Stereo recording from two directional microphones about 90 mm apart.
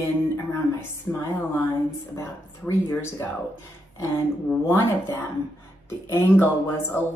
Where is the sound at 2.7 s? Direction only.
25° left (ahead or behind).